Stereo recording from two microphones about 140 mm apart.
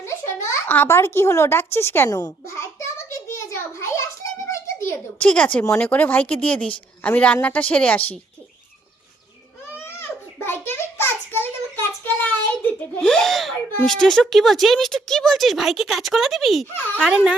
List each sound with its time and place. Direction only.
0.0 s a child's voice: 20° left (ahead or behind)
2.0 s a child's voice: 30° left (ahead or behind)
3.3 s a sound: 20° left (ahead or behind)
5.3 s a woman's voice: 10° left (ahead or behind)
9.7 s a sound: 15° left (ahead or behind)
13.0 s gasp: 5° left (ahead or behind)
13.8 s speech: 5° left (ahead or behind)
16.7 s a woman's voice: 15° left (ahead or behind)
17.0 s a child's voice: 5° right (ahead or behind)